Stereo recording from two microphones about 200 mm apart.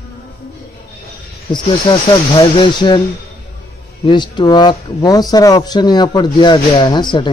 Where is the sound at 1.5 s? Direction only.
25° left (ahead or behind).